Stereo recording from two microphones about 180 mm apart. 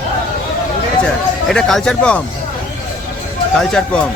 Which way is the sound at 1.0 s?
Centre (ahead or behind).